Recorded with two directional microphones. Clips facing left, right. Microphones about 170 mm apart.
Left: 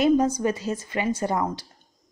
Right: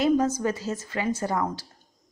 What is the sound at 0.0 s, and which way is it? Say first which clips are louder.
Speech: left 2 dB; 20° left (ahead or behind).